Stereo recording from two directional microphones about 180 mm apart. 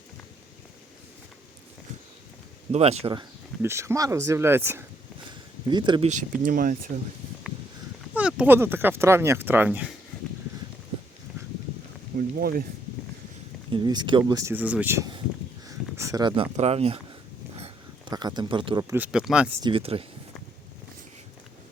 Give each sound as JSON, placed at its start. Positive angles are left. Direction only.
{"t": 2.7, "sound": "speech", "side_deg": -35}
{"t": 3.6, "sound": "speech", "side_deg": -15}
{"t": 5.6, "sound": "speech", "side_deg": -25}
{"t": 6.1, "sound": "speech", "side_deg": -45}
{"t": 8.1, "sound": "speech", "side_deg": -5}
{"t": 12.1, "sound": "speech", "side_deg": -55}
{"t": 13.7, "sound": "speech", "side_deg": -25}
{"t": 17.6, "sound": "a sound", "side_deg": -25}
{"t": 18.9, "sound": "speech", "side_deg": -5}
{"t": 19.6, "sound": "speech", "side_deg": -30}